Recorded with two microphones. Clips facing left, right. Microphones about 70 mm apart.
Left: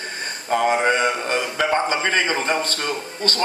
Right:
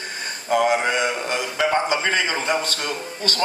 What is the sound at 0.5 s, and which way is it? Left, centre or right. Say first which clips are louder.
A man's voice: left 1 dB; left.